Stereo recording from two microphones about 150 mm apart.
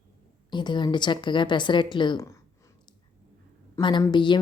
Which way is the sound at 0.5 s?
30° left (ahead or behind).